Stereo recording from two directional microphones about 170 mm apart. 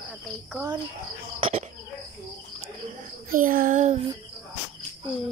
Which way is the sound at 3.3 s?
55° right (ahead or behind).